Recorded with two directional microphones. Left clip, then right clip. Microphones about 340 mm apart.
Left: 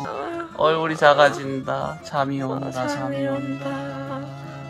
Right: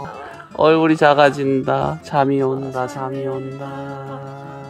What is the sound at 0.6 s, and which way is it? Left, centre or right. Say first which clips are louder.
Speech: right 6 dB; right.